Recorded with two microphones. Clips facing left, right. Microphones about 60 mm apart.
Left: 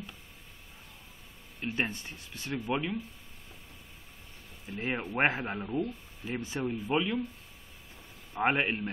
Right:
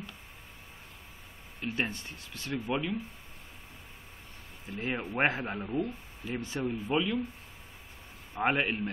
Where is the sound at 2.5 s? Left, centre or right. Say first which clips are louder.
Even; centre.